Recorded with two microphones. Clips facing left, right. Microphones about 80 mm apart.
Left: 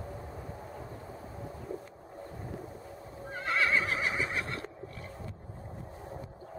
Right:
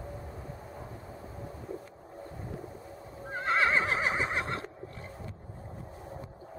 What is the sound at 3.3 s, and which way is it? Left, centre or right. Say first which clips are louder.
Neigh: right 2 dB; right.